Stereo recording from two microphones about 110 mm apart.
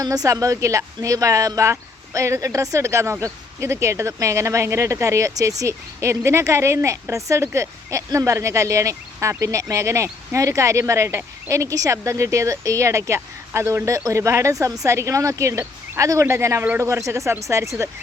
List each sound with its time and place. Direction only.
0.0 s speech: 35° right (ahead or behind)